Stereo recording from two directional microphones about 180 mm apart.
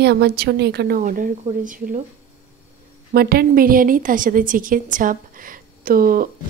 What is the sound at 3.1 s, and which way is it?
A woman's voice, 60° right (ahead or behind).